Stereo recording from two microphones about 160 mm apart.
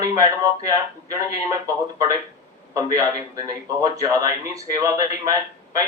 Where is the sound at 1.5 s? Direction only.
20° right (ahead or behind).